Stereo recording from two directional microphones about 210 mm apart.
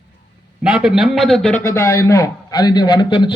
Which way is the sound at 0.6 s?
5° right (ahead or behind).